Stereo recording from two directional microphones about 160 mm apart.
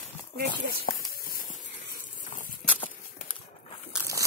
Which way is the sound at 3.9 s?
5° right (ahead or behind).